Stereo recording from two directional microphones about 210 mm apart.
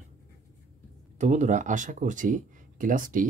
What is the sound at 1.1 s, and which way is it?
Speech, 35° right (ahead or behind).